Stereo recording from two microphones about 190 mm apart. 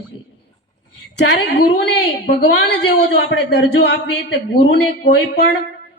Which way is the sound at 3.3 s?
70° left (ahead or behind).